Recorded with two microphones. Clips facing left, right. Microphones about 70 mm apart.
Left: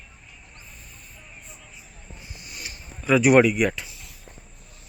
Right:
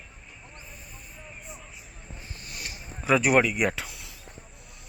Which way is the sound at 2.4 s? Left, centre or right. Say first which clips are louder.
Even; centre.